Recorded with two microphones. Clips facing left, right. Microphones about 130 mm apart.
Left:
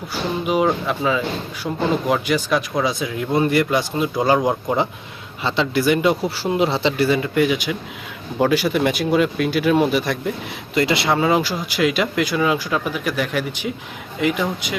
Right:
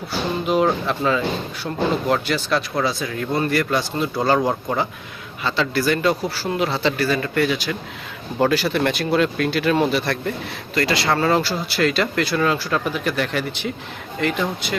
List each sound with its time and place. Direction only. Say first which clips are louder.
0.1 s speech: even; 10° left (ahead or behind)
10.8 s speech: left 2 dB; 20° left (ahead or behind)